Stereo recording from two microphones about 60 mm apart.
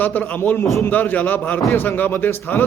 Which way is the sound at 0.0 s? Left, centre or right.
Left.